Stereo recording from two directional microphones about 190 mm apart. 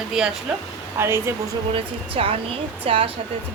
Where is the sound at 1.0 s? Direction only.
15° right (ahead or behind).